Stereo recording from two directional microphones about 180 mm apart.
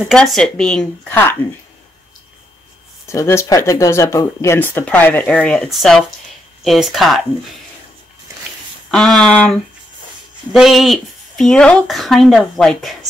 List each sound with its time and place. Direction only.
0.1 s speech: 5° left (ahead or behind)
3.1 s speech: 15° left (ahead or behind)
8.9 s speech: 5° left (ahead or behind)